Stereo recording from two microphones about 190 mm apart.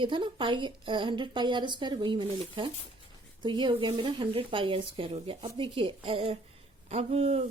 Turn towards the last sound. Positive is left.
turn(degrees=-35)  # may be behind; listen again after turning